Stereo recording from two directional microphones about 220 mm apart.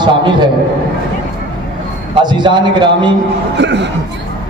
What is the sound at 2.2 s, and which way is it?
Mantra, 20° right (ahead or behind).